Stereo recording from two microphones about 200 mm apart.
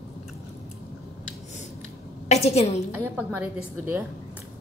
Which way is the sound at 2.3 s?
30° left (ahead or behind).